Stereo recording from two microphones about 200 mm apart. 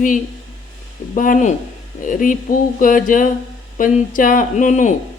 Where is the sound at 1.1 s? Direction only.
40° left (ahead or behind).